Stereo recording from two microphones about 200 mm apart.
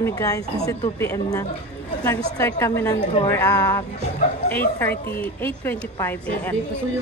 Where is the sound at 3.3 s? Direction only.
15° left (ahead or behind).